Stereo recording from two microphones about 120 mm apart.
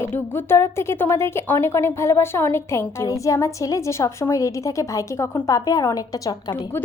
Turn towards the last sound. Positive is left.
turn(degrees=35)  # may be behind; listen again after turning